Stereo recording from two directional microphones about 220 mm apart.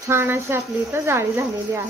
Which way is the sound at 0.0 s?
10° right (ahead or behind).